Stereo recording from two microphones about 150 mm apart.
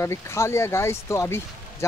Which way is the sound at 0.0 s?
20° left (ahead or behind).